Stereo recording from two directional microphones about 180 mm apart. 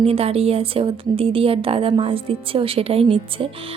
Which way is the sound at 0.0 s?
35° right (ahead or behind).